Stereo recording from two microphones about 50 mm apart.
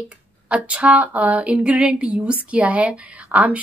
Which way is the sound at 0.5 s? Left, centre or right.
Right.